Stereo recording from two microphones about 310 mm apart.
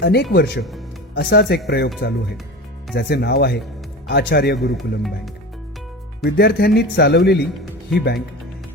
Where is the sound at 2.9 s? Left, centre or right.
Left.